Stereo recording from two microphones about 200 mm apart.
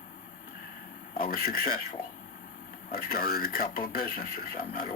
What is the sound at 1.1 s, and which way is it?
Speech, 45° left (ahead or behind).